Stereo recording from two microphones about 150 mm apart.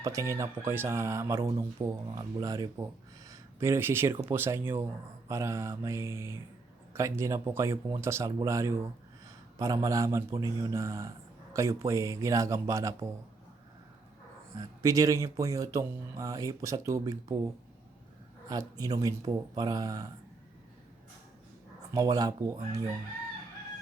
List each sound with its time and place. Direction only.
0.0 s speech: 20° right (ahead or behind)
14.8 s speech: 20° right (ahead or behind)
21.9 s speech: 25° right (ahead or behind)